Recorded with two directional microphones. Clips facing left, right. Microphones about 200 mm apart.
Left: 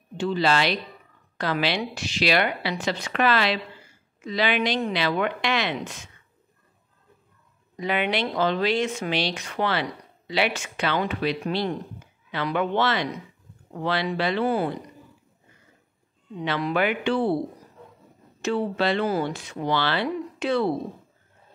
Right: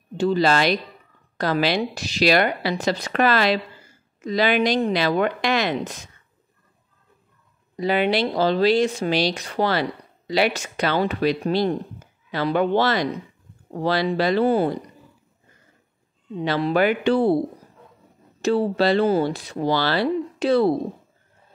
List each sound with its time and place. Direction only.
0.2 s speech: 40° right (ahead or behind)
7.7 s speech: 35° right (ahead or behind)
16.3 s speech: 30° right (ahead or behind)
18.4 s speech: 35° right (ahead or behind)